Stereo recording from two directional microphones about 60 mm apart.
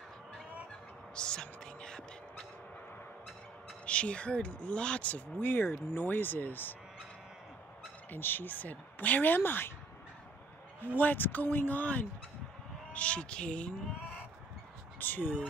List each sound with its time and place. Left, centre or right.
1.1 s music: centre
3.8 s speech: centre
5.5 s speech: left
8.1 s speech: left
11.0 s speech: left
15.0 s speech: left